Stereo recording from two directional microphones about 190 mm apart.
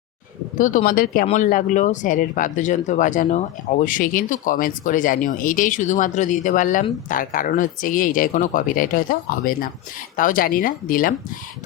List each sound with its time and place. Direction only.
0.5 s speech: 45° left (ahead or behind)